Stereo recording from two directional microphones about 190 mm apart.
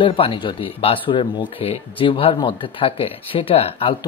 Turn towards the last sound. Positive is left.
turn(degrees=30)  # may be behind; listen again after turning